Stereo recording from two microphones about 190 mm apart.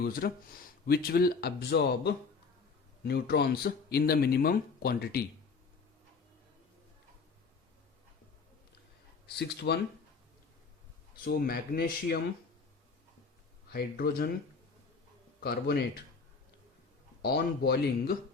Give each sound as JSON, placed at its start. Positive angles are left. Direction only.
{"t": 0.0, "sound": "speech", "side_deg": 50}
{"t": 9.2, "sound": "speech", "side_deg": 60}
{"t": 11.2, "sound": "speech", "side_deg": 50}
{"t": 13.7, "sound": "speech", "side_deg": 55}
{"t": 15.4, "sound": "speech", "side_deg": 55}
{"t": 17.2, "sound": "speech", "side_deg": 55}